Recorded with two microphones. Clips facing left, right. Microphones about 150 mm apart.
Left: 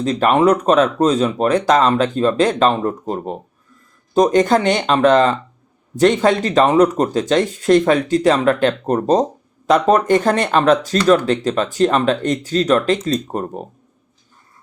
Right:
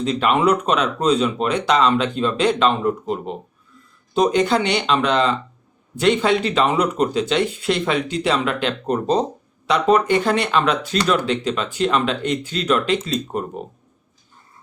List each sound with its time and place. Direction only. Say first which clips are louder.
0.0 s speech: left 4 dB; 45° left (ahead or behind)